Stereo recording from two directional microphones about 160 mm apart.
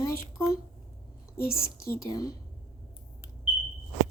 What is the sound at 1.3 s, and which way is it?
Speech, 65° left (ahead or behind).